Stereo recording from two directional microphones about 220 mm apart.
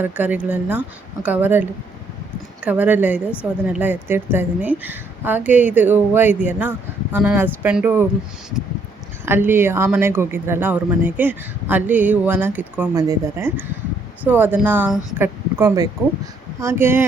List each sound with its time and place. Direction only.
0.0 s speech: 10° right (ahead or behind)
2.6 s speech: 10° right (ahead or behind)
9.2 s speech: 10° right (ahead or behind)